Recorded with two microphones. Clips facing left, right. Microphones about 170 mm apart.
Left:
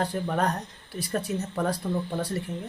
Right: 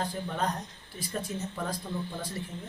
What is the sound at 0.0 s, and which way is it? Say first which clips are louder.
Speech: left 5 dB; 65° left (ahead or behind).